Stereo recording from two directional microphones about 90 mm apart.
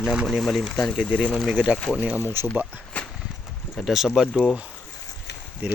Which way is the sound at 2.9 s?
15° left (ahead or behind).